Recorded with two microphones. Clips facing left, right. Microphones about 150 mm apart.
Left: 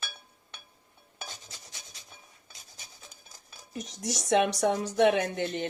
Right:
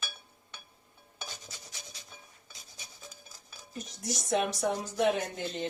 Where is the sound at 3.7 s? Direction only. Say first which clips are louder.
Left 3 dB; 80° left.